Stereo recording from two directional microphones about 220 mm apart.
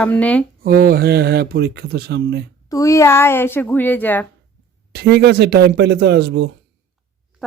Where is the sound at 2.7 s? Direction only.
15° left (ahead or behind).